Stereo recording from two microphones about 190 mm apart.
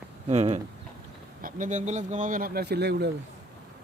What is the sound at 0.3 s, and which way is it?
Speech, 30° right (ahead or behind).